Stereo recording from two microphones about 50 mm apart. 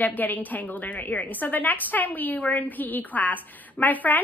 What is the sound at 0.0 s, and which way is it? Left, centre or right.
A woman's voice, left.